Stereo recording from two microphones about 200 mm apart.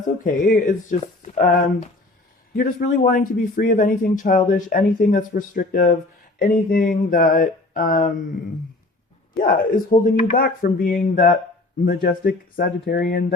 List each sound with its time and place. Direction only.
0.0 s speech: 40° left (ahead or behind)
2.6 s a man's voice: 40° left (ahead or behind)
9.4 s a man's voice: 45° left (ahead or behind)